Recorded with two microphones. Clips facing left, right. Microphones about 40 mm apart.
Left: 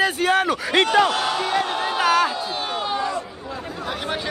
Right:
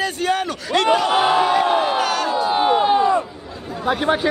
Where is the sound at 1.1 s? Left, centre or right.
Right.